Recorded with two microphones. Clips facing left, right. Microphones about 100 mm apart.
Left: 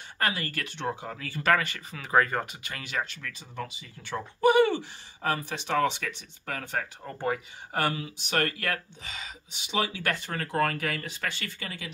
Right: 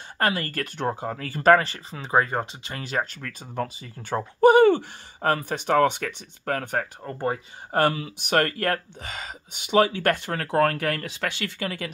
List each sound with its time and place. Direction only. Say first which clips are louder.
0.2 s speech: right 5 dB; 45° right (ahead or behind)
7.9 s speech: right 6 dB; 60° right (ahead or behind)